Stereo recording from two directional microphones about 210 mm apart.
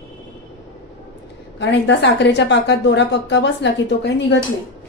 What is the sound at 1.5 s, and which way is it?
A woman's voice, 55° left (ahead or behind).